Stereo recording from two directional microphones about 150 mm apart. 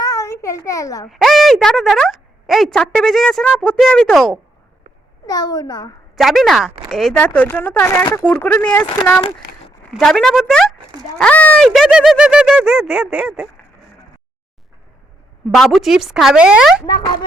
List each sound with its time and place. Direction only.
0.0 s a sound: 20° left (ahead or behind)
1.0 s speech: centre (ahead or behind)
5.2 s a child's voice: 25° left (ahead or behind)
6.1 s speech: centre (ahead or behind)
9.9 s speech: 5° left (ahead or behind)
15.5 s speech: centre (ahead or behind)